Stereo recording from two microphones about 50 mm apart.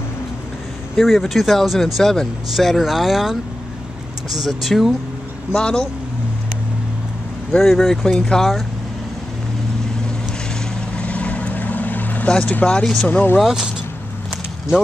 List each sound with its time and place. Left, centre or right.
0.9 s speech: centre
5.6 s speech: centre
7.6 s speech: centre
11.0 s vehicle: left
12.3 s speech: left
12.8 s speech: centre
13.1 s speech: left
13.4 s speech: centre